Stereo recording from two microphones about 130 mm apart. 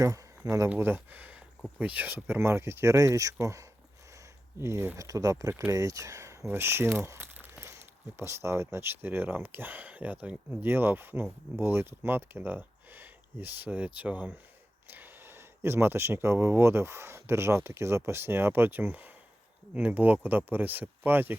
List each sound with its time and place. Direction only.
0.7 s speech: 15° right (ahead or behind)